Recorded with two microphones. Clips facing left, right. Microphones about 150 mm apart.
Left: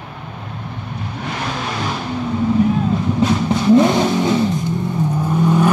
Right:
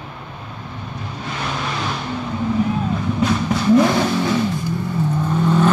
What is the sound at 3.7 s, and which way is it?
Vehicle, 20° left (ahead or behind).